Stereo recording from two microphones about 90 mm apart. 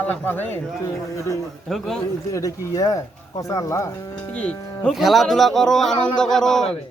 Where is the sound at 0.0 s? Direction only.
20° left (ahead or behind).